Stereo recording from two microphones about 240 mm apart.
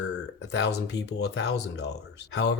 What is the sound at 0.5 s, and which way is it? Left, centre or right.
Speech, left.